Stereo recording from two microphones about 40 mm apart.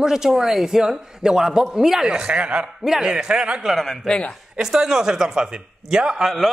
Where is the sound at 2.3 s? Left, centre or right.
Right.